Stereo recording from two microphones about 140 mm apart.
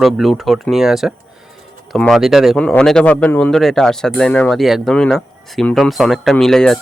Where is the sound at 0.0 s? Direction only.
Centre (ahead or behind).